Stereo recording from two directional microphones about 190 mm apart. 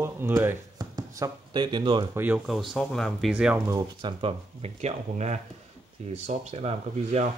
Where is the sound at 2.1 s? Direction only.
5° right (ahead or behind).